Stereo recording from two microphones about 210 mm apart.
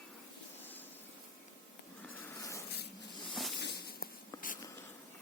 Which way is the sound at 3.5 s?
50° left (ahead or behind).